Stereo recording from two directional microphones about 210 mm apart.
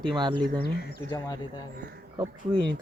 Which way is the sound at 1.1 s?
20° left (ahead or behind).